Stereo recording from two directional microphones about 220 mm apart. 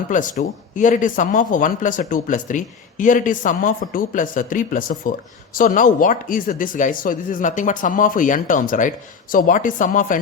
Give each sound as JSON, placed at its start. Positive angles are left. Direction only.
{"t": 0.1, "sound": "speech", "side_deg": 35}